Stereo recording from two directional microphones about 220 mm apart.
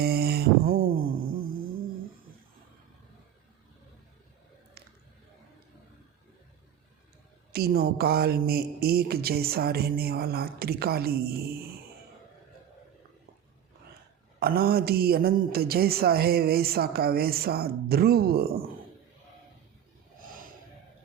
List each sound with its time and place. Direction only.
0.0 s a sound: 45° right (ahead or behind)
7.5 s speech: 45° right (ahead or behind)
14.3 s speech: 45° right (ahead or behind)
20.1 s snort: 40° right (ahead or behind)